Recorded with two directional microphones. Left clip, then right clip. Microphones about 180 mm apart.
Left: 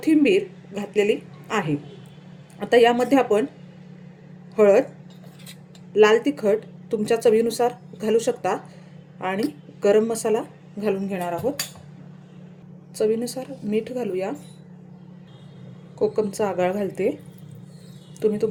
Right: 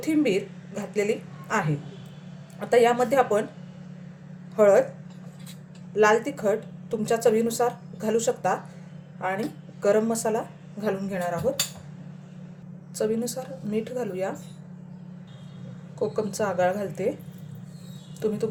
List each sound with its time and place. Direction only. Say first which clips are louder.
0.0 s a woman's voice: left 6 dB; 45° left (ahead or behind)
4.5 s a woman's voice: left 2 dB; 50° left (ahead or behind)
5.9 s a woman's voice: left 4 dB; 45° left (ahead or behind)
9.8 s a woman's voice: left 3 dB; 50° left (ahead or behind)
13.0 s a woman's voice: left 4 dB; 45° left (ahead or behind)
16.0 s a woman's voice: left 4 dB; 40° left (ahead or behind)